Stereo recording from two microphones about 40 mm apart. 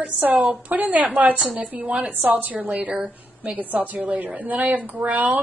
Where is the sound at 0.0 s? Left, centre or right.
Right.